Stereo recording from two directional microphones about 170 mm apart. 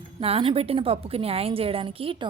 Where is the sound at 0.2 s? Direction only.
35° right (ahead or behind).